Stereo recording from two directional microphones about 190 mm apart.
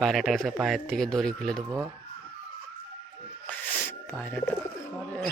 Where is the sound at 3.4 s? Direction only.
10° left (ahead or behind).